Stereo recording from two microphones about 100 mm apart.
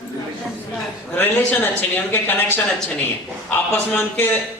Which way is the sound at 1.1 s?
15° left (ahead or behind).